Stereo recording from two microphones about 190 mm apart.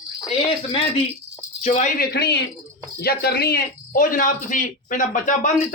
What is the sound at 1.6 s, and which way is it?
A man's voice, 40° left (ahead or behind).